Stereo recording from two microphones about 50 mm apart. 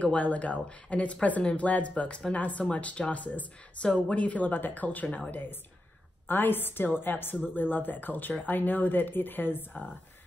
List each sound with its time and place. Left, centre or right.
0.0 s speech: left
6.2 s a woman's voice: left